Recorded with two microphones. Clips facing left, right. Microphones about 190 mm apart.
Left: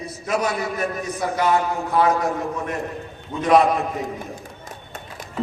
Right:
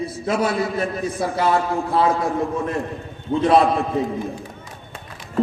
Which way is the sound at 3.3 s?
30° right (ahead or behind).